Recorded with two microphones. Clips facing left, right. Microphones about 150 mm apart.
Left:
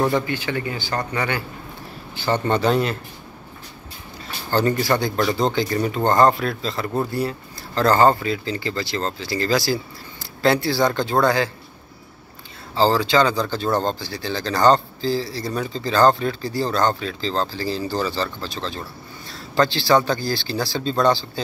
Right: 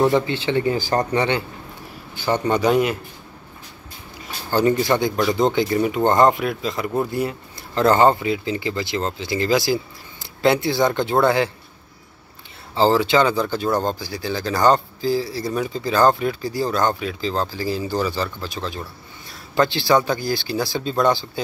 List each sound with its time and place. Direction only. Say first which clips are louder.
0.0 s a man's voice: right 3 dB; 25° right (ahead or behind)
0.7 s speech: right 6 dB; 40° right (ahead or behind)
1.1 s a man's voice: right 4 dB; 25° right (ahead or behind)
4.5 s a man's voice: right 2 dB; 15° right (ahead or behind)
12.7 s a man's voice: right 1 dB; 20° right (ahead or behind)